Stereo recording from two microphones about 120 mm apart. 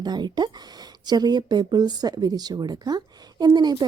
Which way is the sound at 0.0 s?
35° right (ahead or behind).